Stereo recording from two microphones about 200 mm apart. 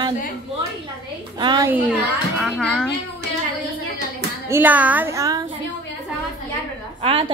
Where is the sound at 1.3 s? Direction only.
20° right (ahead or behind).